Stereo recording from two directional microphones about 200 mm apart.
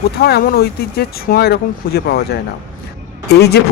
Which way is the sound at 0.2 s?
55° left (ahead or behind).